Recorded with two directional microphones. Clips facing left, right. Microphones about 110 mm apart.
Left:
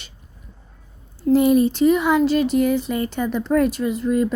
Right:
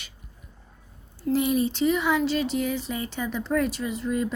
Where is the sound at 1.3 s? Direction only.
45° left (ahead or behind).